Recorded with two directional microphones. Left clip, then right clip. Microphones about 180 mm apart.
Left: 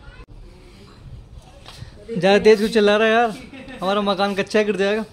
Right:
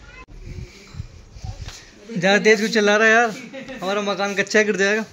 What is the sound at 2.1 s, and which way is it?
A man's voice, 15° left (ahead or behind).